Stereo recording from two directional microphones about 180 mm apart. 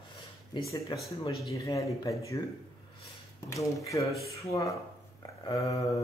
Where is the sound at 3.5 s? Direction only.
15° left (ahead or behind).